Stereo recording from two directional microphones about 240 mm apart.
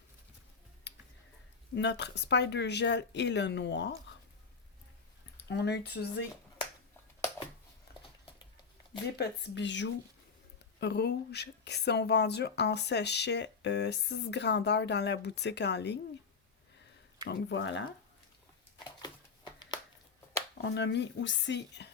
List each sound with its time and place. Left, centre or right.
1.7 s speech: left
5.4 s speech: left
9.1 s speech: left
17.2 s speech: left
19.5 s a sound: centre
20.6 s speech: left